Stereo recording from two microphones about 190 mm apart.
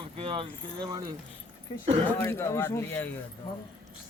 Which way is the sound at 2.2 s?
10° left (ahead or behind).